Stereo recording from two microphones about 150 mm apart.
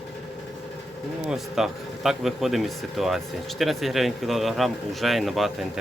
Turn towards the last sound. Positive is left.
turn(degrees=0)  # may be behind; listen again after turning